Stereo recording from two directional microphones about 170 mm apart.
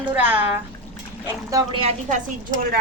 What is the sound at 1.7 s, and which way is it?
Speech, 30° right (ahead or behind).